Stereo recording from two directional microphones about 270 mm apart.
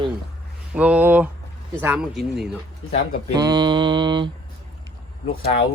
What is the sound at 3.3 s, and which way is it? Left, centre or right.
Mantra, centre.